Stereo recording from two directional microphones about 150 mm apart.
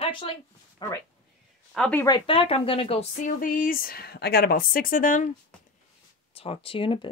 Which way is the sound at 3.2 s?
65° left (ahead or behind).